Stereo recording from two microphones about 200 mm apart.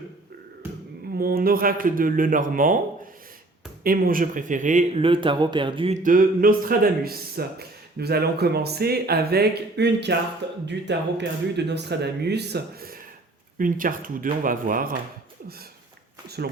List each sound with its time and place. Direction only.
1.2 s speech: 45° right (ahead or behind)
3.8 s speech: 45° right (ahead or behind); by 6.0 s 25° right (ahead or behind)
6.0 s speech: 45° right (ahead or behind)